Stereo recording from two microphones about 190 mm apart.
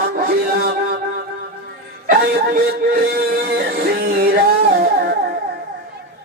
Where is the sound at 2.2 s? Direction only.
55° right (ahead or behind).